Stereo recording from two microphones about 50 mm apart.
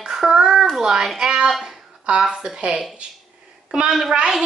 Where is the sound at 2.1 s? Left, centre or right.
Centre.